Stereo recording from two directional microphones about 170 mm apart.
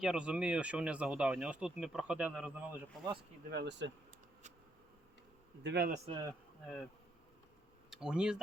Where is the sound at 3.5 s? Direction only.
85° right.